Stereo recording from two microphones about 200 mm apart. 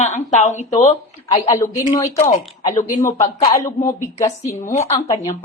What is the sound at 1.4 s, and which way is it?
Speech, 15° left (ahead or behind).